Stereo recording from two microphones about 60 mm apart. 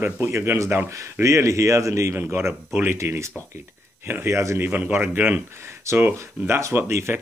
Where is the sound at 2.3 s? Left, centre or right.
Right.